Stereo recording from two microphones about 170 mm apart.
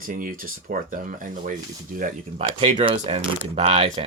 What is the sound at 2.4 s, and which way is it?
Speech, 30° right (ahead or behind).